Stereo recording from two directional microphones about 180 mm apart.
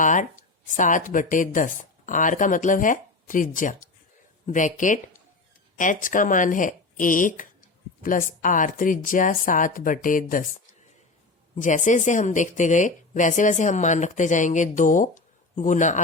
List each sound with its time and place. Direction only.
0.0 s speech: 45° left (ahead or behind)
11.5 s speech: 45° left (ahead or behind)